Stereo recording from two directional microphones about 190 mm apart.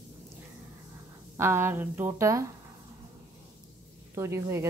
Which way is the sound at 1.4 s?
15° right (ahead or behind).